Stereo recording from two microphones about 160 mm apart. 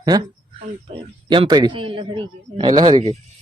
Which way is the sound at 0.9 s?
30° right (ahead or behind).